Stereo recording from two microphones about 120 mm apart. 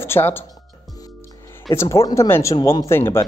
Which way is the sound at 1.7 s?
25° left (ahead or behind).